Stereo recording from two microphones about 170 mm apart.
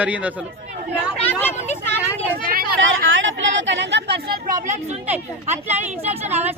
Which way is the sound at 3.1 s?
90° right.